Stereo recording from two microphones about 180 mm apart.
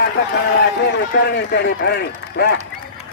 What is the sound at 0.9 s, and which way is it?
A man's voice, 65° left (ahead or behind).